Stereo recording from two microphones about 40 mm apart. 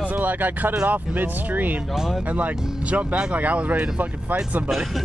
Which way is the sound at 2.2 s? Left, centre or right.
Right.